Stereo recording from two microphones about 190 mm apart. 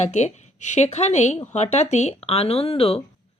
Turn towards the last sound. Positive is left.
turn(degrees=30)  # may be behind; listen again after turning